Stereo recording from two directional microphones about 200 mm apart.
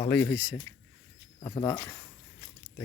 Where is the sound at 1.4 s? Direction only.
20° left (ahead or behind).